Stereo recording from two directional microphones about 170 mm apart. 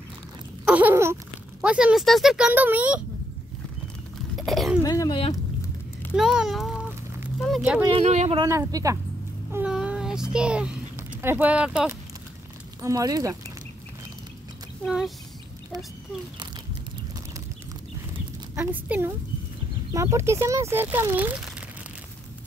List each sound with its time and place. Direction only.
0.7 s speech: 10° right (ahead or behind)
4.4 s throat clearing: centre (ahead or behind)
4.8 s a sound: 20° left (ahead or behind)
6.1 s a child's voice: centre (ahead or behind)
7.3 s a sound: centre (ahead or behind)
7.9 s speech: 40° right (ahead or behind)
8.5 s speech: 20° right (ahead or behind)
9.5 s a child's voice: 5° right (ahead or behind)
12.8 s speech: 20° right (ahead or behind)
14.9 s speech: centre (ahead or behind)
18.6 s speech: 10° right (ahead or behind)